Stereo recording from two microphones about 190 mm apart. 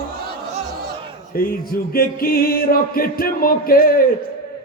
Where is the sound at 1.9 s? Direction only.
50° left (ahead or behind).